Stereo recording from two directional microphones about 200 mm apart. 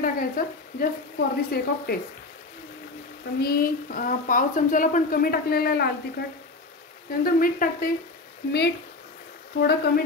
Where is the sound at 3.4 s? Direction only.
50° left (ahead or behind).